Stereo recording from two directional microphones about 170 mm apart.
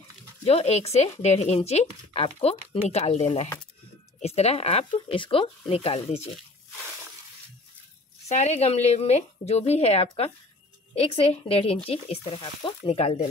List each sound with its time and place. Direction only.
0.5 s speech: 40° left (ahead or behind)
8.3 s speech: 40° left (ahead or behind)